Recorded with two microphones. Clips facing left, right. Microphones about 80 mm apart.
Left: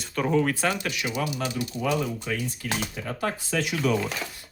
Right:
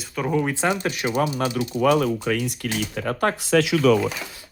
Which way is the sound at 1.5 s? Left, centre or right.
Right.